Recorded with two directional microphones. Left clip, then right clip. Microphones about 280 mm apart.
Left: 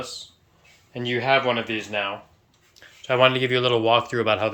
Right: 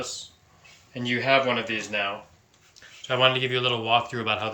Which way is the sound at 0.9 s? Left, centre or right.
Centre.